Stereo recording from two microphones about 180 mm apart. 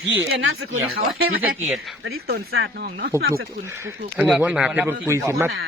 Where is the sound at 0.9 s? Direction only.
90° right.